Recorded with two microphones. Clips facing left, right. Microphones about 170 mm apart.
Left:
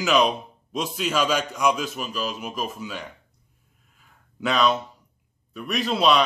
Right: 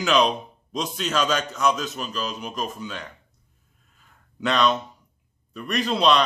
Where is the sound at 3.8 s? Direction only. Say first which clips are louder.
Even; 5° left (ahead or behind).